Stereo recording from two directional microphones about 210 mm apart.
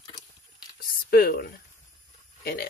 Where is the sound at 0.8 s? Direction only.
45° left (ahead or behind).